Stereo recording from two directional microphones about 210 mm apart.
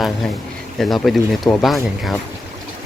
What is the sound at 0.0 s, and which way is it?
Speech, centre (ahead or behind).